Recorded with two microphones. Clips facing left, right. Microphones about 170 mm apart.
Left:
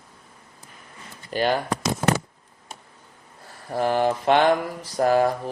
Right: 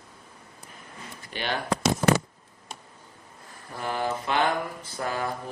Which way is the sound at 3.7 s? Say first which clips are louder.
Left 8 dB; 35° left (ahead or behind).